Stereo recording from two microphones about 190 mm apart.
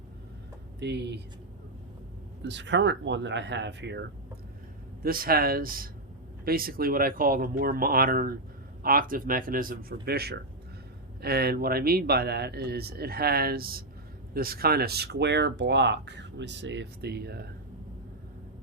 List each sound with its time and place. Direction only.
0.8 s speech: 65° right (ahead or behind)
2.4 s speech: 65° right (ahead or behind)
5.0 s speech: 50° right (ahead or behind)